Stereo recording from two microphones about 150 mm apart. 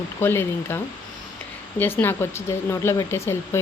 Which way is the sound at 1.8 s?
15° left (ahead or behind).